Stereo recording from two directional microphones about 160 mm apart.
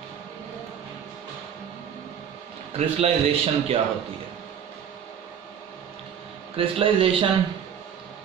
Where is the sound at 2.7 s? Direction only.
40° right (ahead or behind).